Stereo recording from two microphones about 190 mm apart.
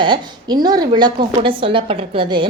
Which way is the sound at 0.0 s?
25° right (ahead or behind).